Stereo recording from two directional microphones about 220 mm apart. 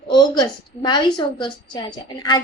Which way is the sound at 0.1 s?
20° left (ahead or behind).